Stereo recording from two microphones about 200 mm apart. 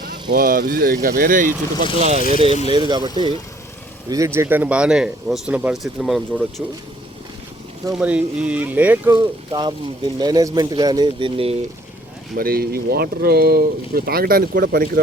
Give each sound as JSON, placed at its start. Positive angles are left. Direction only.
{"t": 0.3, "sound": "speech", "side_deg": -45}
{"t": 2.6, "sound": "speech", "side_deg": -20}
{"t": 7.9, "sound": "speech", "side_deg": -5}
{"t": 9.1, "sound": "speech", "side_deg": -25}
{"t": 12.4, "sound": "speech", "side_deg": -50}